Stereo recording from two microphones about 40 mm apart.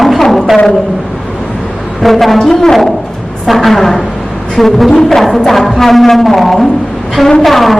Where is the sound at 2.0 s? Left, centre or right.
Centre.